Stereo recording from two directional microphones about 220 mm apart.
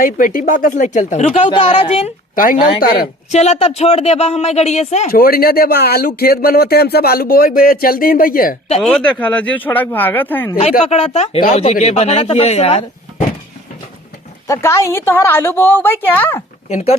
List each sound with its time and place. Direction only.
0.0 s speech: 40° left (ahead or behind)
2.3 s a woman's voice: 40° left (ahead or behind)
8.8 s a woman's voice: 5° left (ahead or behind)
10.6 s speech: 25° left (ahead or behind)
14.4 s a woman's voice: 15° left (ahead or behind)
16.6 s speech: 30° left (ahead or behind)